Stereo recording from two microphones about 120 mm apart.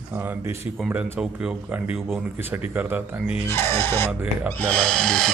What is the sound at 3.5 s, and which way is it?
Speech, 20° left (ahead or behind).